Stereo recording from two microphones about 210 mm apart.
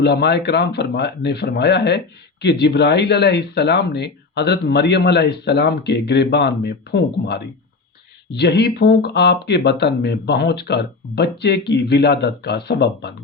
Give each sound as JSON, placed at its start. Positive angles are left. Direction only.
{"t": 0.0, "sound": "speech", "side_deg": 55}